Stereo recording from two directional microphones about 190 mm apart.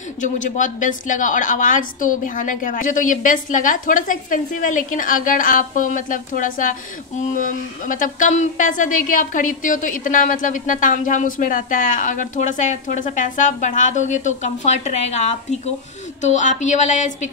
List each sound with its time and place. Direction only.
0.2 s a woman's voice: 40° left (ahead or behind)